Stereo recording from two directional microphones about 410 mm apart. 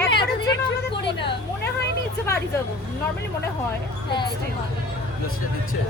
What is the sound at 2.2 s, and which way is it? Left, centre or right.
Speech, centre.